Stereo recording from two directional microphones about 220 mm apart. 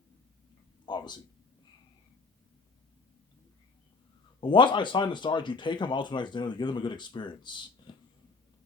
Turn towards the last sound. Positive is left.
turn(degrees=20)  # may be behind; listen again after turning